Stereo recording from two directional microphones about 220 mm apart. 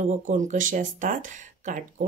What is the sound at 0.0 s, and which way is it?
Speech, 35° right (ahead or behind).